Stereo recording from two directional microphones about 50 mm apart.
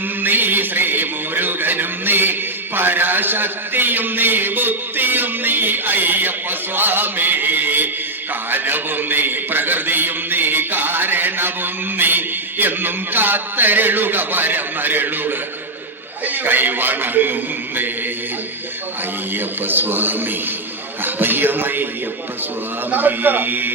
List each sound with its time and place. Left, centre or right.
0.2 s music: right
2.7 s a man's voice: right
19.3 s a man's voice: right
22.9 s a man's voice: right